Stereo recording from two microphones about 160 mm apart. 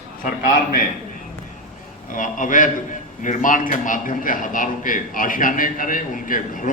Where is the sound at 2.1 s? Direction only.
55° left (ahead or behind).